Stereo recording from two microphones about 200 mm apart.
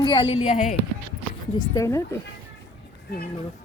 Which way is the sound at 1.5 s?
15° left (ahead or behind).